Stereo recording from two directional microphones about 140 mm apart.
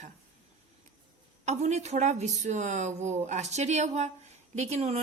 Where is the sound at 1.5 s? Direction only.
55° right (ahead or behind).